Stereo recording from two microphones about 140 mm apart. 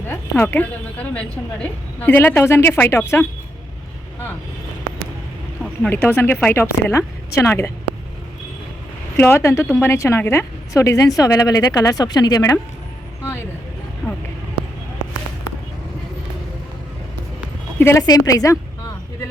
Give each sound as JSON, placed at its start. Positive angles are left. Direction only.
{"t": 0.1, "sound": "speech", "side_deg": 15}
{"t": 5.6, "sound": "speech", "side_deg": 10}
{"t": 9.1, "sound": "a woman's voice", "side_deg": 15}
{"t": 14.0, "sound": "vehicle", "side_deg": 0}
{"t": 17.7, "sound": "a woman's voice", "side_deg": 15}
{"t": 18.0, "sound": "a woman's voice", "side_deg": 25}